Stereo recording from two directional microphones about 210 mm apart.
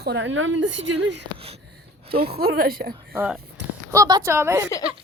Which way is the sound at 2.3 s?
45° right (ahead or behind).